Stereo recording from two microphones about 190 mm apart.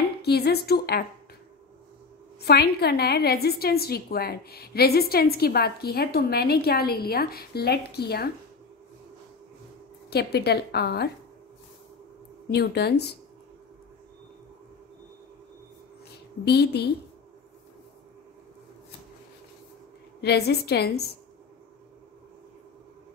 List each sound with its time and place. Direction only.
0.2 s a woman's voice: 55° left (ahead or behind)
2.4 s a woman's voice: 55° left (ahead or behind)
10.0 s a woman's voice: 60° left (ahead or behind)
12.4 s a woman's voice: 60° left (ahead or behind)
16.1 s speech: 60° left (ahead or behind)
20.2 s a woman's voice: 60° left (ahead or behind)